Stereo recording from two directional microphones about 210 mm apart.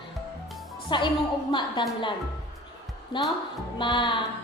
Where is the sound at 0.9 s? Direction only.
20° left (ahead or behind).